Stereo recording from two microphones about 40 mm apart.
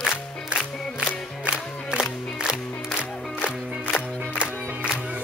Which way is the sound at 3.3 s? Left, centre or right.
Left.